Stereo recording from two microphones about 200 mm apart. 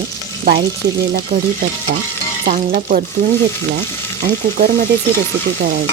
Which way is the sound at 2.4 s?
45° right (ahead or behind).